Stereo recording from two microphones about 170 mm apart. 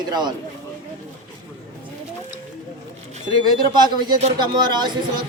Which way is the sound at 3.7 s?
25° right (ahead or behind).